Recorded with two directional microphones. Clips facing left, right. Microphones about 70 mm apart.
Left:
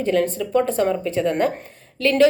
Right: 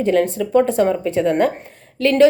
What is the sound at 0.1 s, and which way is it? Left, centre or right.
A woman's voice, right.